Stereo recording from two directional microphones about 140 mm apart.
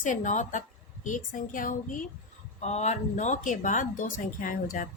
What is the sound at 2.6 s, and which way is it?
Speech, 55° left (ahead or behind).